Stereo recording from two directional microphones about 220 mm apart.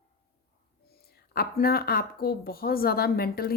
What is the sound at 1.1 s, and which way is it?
Speech, 45° left (ahead or behind).